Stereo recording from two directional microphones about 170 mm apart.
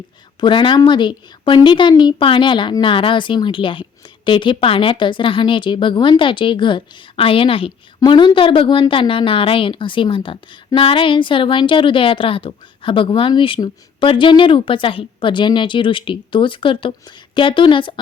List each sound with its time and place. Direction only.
0.3 s a woman's voice: 30° left (ahead or behind)